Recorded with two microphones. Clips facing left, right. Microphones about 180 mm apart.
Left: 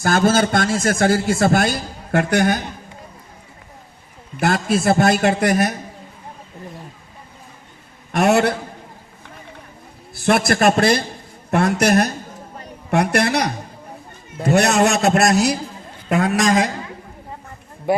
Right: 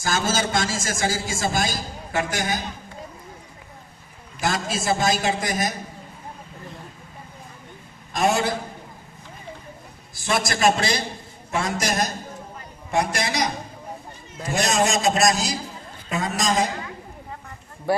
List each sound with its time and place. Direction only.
0.0 s a man's voice: 55° left (ahead or behind)
4.4 s a man's voice: 60° left (ahead or behind)
8.1 s a man's voice: 65° left (ahead or behind)
10.2 s a man's voice: 60° left (ahead or behind)
17.9 s a man's voice: 20° left (ahead or behind)